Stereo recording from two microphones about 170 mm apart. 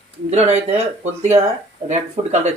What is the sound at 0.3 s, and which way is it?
Speech, 40° right (ahead or behind).